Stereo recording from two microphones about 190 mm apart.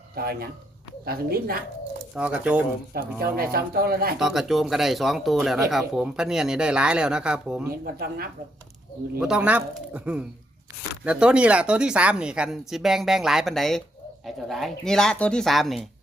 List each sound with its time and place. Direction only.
1.0 s speech: 50° right (ahead or behind)
2.1 s speech: 5° right (ahead or behind)
2.9 s speech: 55° right (ahead or behind)
4.2 s speech: centre (ahead or behind)
7.7 s speech: 55° right (ahead or behind)
9.1 s speech: 5° right (ahead or behind)